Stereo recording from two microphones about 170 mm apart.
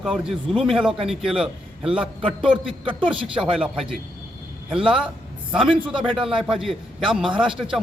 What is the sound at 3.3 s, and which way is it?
A man's voice, 5° right (ahead or behind).